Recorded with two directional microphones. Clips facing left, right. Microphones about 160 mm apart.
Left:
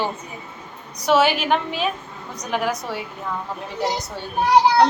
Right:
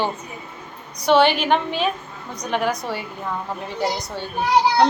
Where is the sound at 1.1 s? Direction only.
5° left (ahead or behind).